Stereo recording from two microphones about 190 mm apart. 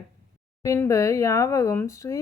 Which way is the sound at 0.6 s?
15° left (ahead or behind).